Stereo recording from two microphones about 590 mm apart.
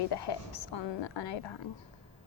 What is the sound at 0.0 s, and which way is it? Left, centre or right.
A woman's voice, left.